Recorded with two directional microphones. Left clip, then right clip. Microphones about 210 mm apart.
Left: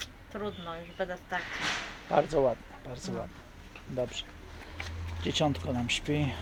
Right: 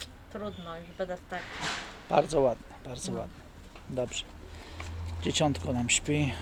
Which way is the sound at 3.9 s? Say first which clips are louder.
Right 1 dB; 10° right (ahead or behind).